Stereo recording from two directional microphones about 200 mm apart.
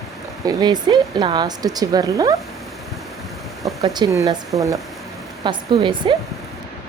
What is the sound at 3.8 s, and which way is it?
Speech, 15° right (ahead or behind).